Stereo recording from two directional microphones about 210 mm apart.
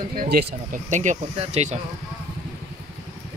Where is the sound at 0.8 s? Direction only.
35° right (ahead or behind).